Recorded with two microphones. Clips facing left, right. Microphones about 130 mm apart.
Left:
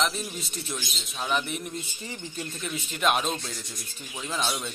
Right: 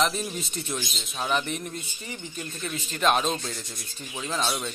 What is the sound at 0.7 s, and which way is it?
Speech, 20° right (ahead or behind).